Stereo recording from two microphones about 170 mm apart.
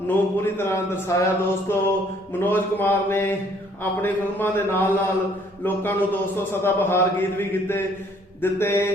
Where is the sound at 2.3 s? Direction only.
10° left (ahead or behind).